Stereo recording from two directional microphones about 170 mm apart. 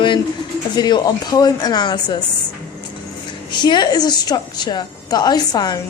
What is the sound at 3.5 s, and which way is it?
A woman's voice, 25° left (ahead or behind).